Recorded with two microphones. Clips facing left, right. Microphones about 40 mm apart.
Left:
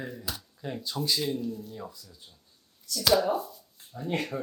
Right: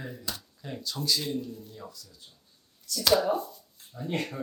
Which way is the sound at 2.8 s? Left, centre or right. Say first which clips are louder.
Even; centre.